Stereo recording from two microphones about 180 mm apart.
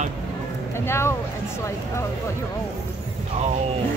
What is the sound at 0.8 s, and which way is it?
Speech, 15° left (ahead or behind).